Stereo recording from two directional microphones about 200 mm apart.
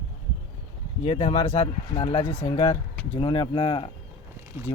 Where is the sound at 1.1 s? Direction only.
35° left (ahead or behind).